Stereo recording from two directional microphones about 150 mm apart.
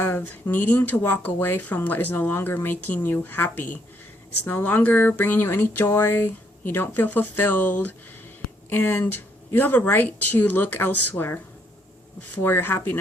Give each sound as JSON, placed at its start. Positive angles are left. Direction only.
{"t": 0.0, "sound": "speech", "side_deg": 15}
{"t": 8.7, "sound": "speech", "side_deg": 15}